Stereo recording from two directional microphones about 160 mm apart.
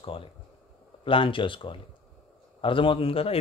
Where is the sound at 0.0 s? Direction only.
35° left (ahead or behind).